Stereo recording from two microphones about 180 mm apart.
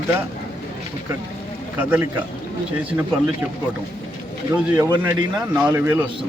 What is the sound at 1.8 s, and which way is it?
Speech, 10° right (ahead or behind).